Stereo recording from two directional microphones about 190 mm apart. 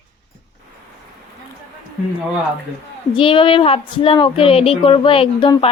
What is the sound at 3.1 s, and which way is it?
Speech, 25° left (ahead or behind).